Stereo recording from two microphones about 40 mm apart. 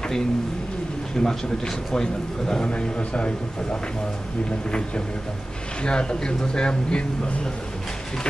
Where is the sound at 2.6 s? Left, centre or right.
Left.